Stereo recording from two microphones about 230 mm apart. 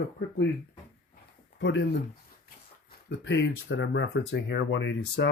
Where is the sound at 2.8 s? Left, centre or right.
Left.